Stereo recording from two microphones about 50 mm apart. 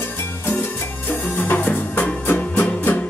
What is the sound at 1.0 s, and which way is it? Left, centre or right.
Music, left.